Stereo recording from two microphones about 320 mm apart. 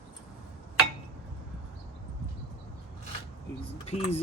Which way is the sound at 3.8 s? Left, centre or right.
Centre.